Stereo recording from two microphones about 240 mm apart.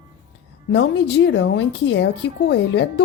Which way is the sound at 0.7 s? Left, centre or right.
Left.